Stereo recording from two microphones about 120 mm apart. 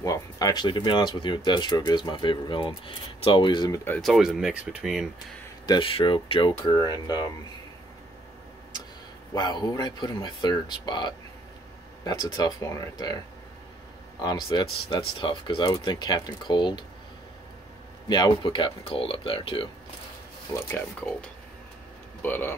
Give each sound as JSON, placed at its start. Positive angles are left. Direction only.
{"t": 0.0, "sound": "speech", "side_deg": 30}
{"t": 4.0, "sound": "speech", "side_deg": 0}
{"t": 5.7, "sound": "speech", "side_deg": 50}
{"t": 6.6, "sound": "speech", "side_deg": 35}
{"t": 9.3, "sound": "speech", "side_deg": 35}
{"t": 14.2, "sound": "speech", "side_deg": 35}
{"t": 18.0, "sound": "speech", "side_deg": 40}
{"t": 22.2, "sound": "speech", "side_deg": 15}